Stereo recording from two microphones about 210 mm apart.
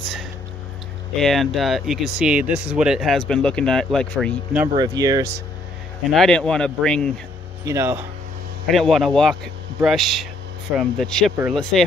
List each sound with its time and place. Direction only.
1.2 s speech: centre (ahead or behind)
4.7 s speech: 20° right (ahead or behind)
6.1 s speech: 5° left (ahead or behind)
7.6 s speech: 10° right (ahead or behind)
8.6 s speech: centre (ahead or behind)